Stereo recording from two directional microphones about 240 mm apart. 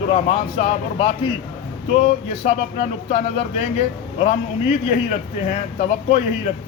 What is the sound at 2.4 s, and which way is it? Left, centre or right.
Speech, left.